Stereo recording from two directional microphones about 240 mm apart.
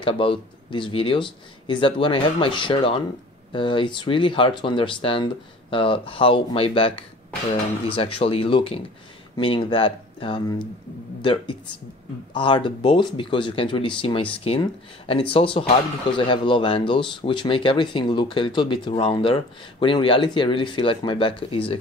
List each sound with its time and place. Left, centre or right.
0.0 s speech: left
12.4 s speech: centre